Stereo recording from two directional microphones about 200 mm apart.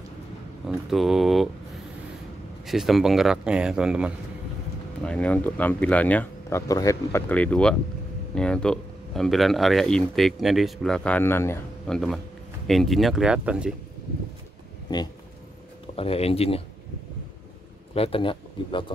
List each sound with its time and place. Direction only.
0.7 s speech: centre (ahead or behind)
2.6 s speech: centre (ahead or behind)
5.0 s speech: 5° left (ahead or behind)
12.6 s speech: centre (ahead or behind)
16.0 s speech: 30° left (ahead or behind)
17.9 s speech: 30° left (ahead or behind)